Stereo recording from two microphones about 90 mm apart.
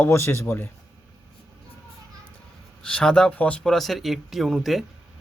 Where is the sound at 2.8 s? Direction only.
10° left (ahead or behind).